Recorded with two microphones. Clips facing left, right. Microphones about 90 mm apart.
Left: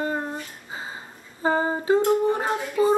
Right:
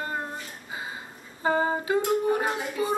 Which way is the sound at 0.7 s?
30° left (ahead or behind).